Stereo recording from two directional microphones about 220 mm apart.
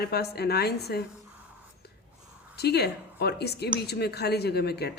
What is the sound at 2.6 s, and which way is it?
Speech, 45° left (ahead or behind).